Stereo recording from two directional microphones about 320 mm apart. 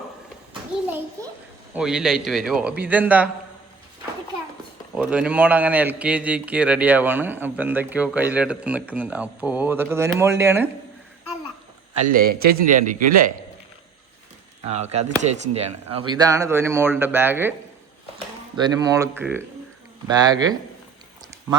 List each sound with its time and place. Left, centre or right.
1.7 s a man's voice: centre
4.9 s a man's voice: centre
12.0 s a man's voice: right
14.6 s speech: centre
18.5 s speech: centre